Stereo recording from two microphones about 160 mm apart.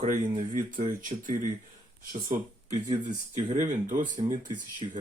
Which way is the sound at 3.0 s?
50° right (ahead or behind).